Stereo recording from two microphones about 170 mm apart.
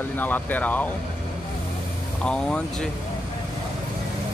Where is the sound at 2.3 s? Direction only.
5° left (ahead or behind).